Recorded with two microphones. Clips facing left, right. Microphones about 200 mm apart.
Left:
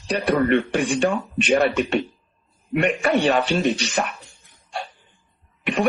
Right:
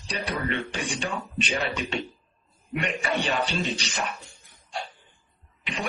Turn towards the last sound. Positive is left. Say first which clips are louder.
# left 11 dB
turn(degrees=55)  # may be behind; listen again after turning